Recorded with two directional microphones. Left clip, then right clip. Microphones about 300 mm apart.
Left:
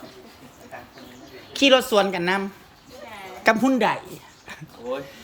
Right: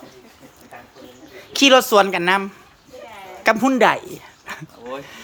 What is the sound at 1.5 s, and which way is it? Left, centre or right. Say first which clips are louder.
Speech: right 5 dB; centre.